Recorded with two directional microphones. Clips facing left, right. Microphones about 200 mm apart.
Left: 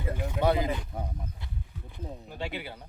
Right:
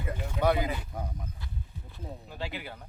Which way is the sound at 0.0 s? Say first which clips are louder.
Left 1 dB; 25° left (ahead or behind).